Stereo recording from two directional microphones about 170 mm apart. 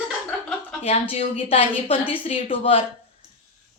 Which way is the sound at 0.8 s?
35° left (ahead or behind).